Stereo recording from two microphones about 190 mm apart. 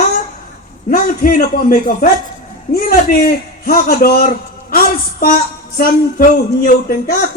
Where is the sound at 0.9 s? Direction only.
45° left (ahead or behind).